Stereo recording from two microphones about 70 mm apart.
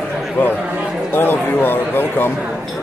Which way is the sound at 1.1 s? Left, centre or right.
Left.